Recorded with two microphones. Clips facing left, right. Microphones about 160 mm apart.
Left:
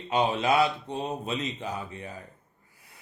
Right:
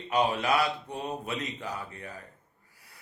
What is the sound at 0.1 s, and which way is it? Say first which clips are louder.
Speech: left 2 dB; 25° left (ahead or behind).